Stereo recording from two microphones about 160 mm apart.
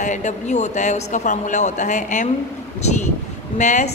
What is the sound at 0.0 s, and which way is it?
A woman's voice, 50° left (ahead or behind).